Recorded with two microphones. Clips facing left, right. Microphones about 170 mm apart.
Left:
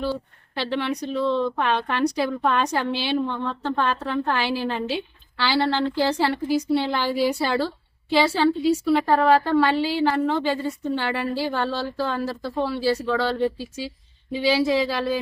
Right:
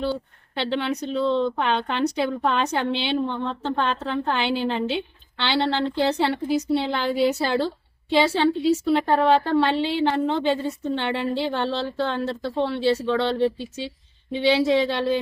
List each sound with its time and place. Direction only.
0.0 s a woman's voice: centre (ahead or behind)
12.2 s speech: 25° right (ahead or behind)
12.6 s a woman's voice: 5° left (ahead or behind)